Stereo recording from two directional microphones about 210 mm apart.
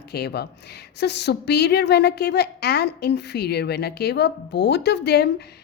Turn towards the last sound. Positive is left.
turn(degrees=50)  # may be behind; listen again after turning